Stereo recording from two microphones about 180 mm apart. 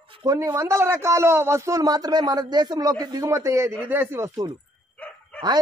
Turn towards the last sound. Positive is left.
turn(degrees=10)  # may be behind; listen again after turning